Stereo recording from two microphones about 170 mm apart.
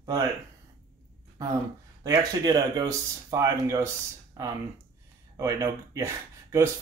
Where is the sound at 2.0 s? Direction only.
20° right (ahead or behind).